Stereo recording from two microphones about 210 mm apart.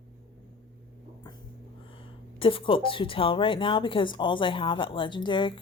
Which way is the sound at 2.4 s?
25° left (ahead or behind).